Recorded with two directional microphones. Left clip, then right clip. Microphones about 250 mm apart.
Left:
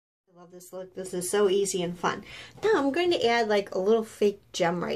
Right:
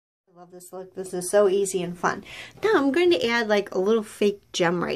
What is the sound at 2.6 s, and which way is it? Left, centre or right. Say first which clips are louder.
Speech: right 4 dB; right.